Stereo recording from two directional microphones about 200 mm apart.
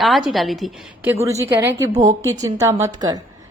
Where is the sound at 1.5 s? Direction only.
10° right (ahead or behind).